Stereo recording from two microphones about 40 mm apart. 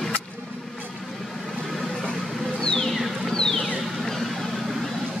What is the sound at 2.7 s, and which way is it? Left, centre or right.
Music, centre.